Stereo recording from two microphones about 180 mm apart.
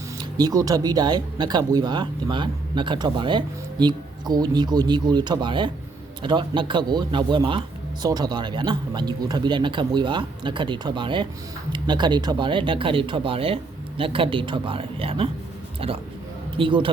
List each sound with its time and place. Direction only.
0.2 s speech: 20° right (ahead or behind)